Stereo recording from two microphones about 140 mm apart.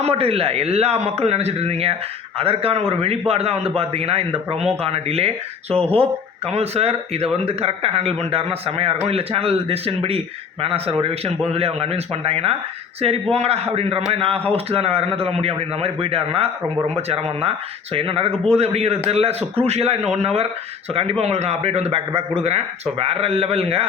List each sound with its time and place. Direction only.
0.0 s a man's voice: 45° right (ahead or behind)